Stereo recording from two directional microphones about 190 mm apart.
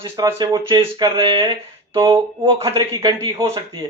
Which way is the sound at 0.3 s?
20° right (ahead or behind).